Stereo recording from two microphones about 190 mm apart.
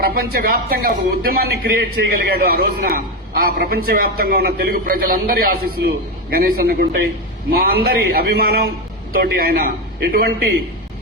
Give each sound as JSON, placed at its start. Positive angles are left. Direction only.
{"t": 0.0, "sound": "a man's voice", "side_deg": -55}